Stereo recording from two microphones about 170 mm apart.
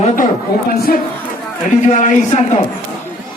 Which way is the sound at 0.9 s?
60° left (ahead or behind).